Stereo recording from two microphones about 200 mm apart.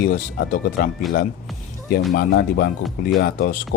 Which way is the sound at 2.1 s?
55° left (ahead or behind).